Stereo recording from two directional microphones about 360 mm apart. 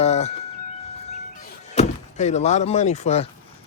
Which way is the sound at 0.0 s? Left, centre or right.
Centre.